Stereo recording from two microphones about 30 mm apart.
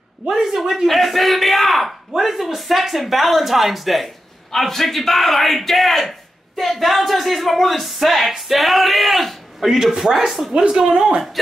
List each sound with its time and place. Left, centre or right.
0.3 s speech: centre
0.8 s a woman's voice: centre
4.5 s a woman's voice: centre
9.6 s speech: centre
10.5 s speech: right